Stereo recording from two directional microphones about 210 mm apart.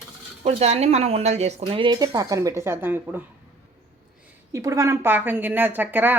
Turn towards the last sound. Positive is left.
turn(degrees=-10)  # may be behind; listen again after turning